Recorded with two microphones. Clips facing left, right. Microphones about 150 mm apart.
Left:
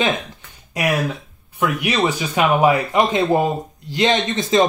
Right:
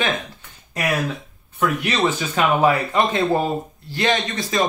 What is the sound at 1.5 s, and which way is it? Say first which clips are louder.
A man's voice: left 1 dB; 10° left (ahead or behind).